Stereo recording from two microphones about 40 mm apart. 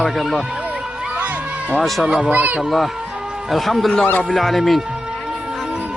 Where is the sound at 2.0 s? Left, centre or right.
Centre.